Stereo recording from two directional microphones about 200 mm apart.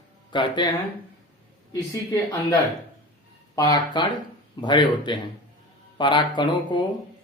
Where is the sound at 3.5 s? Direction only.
20° left (ahead or behind).